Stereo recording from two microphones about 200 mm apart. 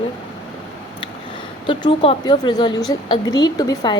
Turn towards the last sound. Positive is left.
turn(degrees=20)  # may be behind; listen again after turning